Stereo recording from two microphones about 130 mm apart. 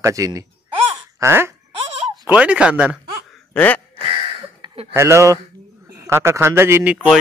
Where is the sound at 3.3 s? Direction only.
10° left (ahead or behind).